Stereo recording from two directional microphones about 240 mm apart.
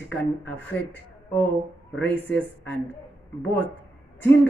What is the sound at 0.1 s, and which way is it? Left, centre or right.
Speech, centre.